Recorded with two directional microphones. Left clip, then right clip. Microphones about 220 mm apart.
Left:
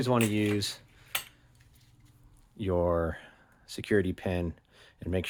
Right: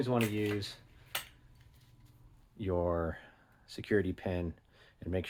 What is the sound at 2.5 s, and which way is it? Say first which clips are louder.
Speech: left 5 dB; 30° left (ahead or behind).